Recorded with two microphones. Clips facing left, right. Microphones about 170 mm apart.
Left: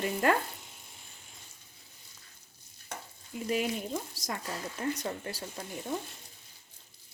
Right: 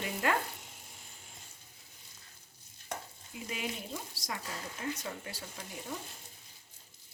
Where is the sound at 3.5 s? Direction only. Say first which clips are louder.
Left 8 dB; 45° left (ahead or behind).